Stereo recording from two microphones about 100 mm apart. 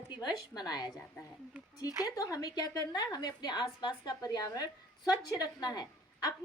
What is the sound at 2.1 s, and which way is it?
A woman's voice, 35° left (ahead or behind).